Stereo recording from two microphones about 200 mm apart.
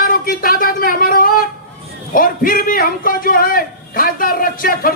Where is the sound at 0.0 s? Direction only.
45° left (ahead or behind).